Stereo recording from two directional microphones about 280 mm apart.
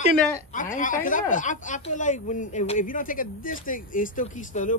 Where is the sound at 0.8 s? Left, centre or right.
Left.